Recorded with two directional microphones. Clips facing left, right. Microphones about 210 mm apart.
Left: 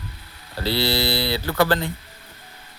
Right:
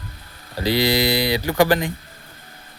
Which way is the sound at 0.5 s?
15° right (ahead or behind).